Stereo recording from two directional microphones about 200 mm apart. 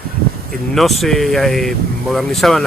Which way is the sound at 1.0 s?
Centre (ahead or behind).